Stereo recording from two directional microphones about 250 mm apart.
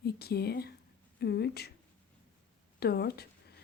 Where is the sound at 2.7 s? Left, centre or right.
Left.